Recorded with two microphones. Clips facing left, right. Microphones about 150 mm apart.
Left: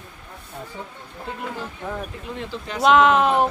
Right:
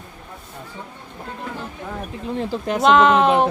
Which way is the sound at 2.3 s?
40° right (ahead or behind).